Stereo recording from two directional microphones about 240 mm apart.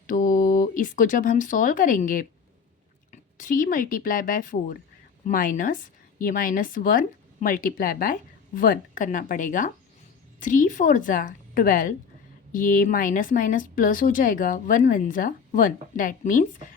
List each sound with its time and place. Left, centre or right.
0.1 s speech: left